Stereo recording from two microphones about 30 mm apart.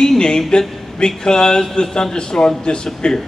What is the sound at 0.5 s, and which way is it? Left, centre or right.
A man's voice, left.